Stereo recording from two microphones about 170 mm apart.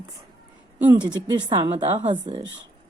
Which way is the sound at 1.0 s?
25° right (ahead or behind).